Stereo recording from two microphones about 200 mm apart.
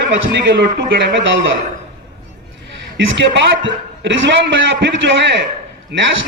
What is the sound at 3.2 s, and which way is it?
A man's voice, 60° right (ahead or behind).